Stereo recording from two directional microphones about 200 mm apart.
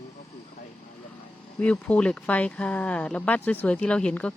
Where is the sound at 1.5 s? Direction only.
5° left (ahead or behind).